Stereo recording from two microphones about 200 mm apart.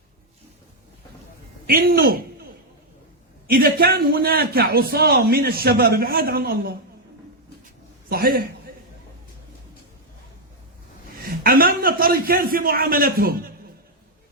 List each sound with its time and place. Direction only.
1.6 s a man's voice: 50° right (ahead or behind)
3.4 s a man's voice: 45° right (ahead or behind)
8.1 s a man's voice: 50° right (ahead or behind)
11.2 s a man's voice: 50° right (ahead or behind)